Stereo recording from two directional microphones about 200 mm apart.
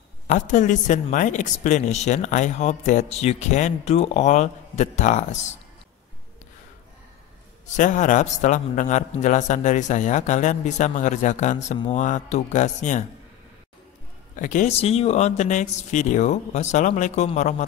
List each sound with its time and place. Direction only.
0.3 s speech: 40° left (ahead or behind)
7.7 s speech: 40° left (ahead or behind)
14.3 s speech: 40° left (ahead or behind)